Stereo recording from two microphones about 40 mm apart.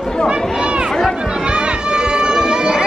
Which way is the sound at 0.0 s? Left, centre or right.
Centre.